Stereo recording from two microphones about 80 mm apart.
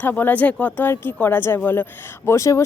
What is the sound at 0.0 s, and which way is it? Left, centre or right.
Speech, left.